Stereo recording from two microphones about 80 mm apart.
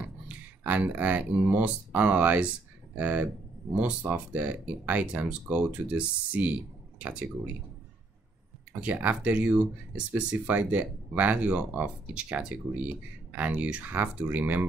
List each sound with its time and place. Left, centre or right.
0.0 s speech: right
8.8 s speech: centre